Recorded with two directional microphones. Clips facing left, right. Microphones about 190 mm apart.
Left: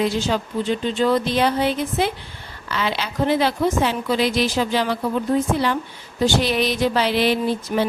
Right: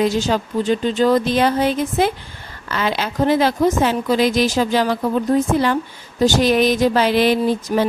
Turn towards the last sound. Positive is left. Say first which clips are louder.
# right 3 dB
turn(degrees=-45)  # may be behind; listen again after turning